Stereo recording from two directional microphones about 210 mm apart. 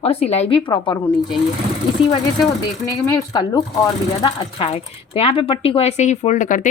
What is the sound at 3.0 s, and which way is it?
Speech, 20° left (ahead or behind).